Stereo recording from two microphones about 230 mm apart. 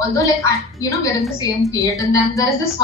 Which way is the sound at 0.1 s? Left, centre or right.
Centre.